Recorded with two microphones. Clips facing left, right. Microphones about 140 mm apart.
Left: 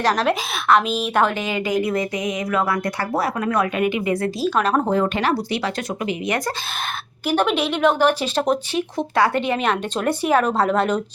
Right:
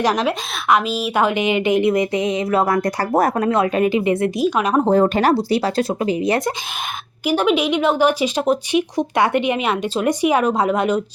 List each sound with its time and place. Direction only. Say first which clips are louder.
0.0 s a woman's voice: right 1 dB; 10° right (ahead or behind); by 3.5 s 40° right (ahead or behind)
3.5 s a woman's voice: right 4 dB; 30° right (ahead or behind); by 4.8 s 15° right (ahead or behind)
4.9 s a woman's voice: right 5 dB; 40° right (ahead or behind)
7.3 s speech: right 3 dB; 10° right (ahead or behind)